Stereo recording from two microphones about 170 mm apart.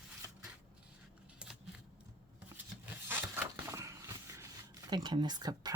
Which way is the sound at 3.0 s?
10° right (ahead or behind).